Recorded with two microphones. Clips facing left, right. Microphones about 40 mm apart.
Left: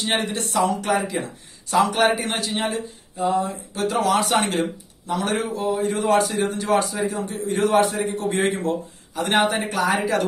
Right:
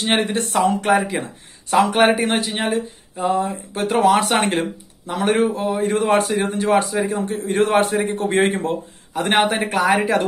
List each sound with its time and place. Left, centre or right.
0.0 s speech: right
2.7 s speech: right
5.7 s speech: right